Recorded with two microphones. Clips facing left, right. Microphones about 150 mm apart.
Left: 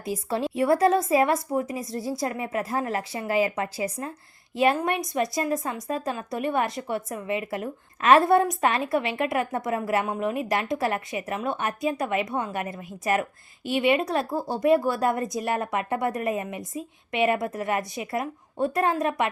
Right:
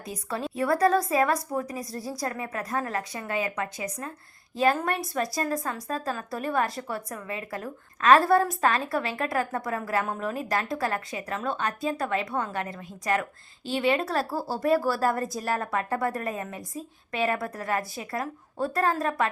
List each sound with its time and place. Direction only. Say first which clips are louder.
0.0 s a woman's voice: left 5 dB; 30° left (ahead or behind)
5.1 s a woman's voice: left 3 dB; 15° left (ahead or behind)